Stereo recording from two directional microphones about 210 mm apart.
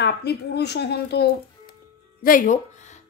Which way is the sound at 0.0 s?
50° left (ahead or behind).